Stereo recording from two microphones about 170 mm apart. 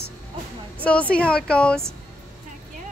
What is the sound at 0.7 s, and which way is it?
A woman's voice, 10° left (ahead or behind).